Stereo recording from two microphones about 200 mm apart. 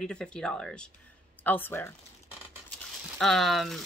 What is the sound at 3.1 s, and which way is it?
Speech, centre (ahead or behind).